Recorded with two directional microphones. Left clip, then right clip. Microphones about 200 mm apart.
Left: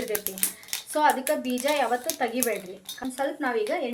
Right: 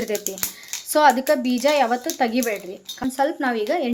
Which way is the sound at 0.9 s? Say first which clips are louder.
Right 7 dB; 55° right (ahead or behind).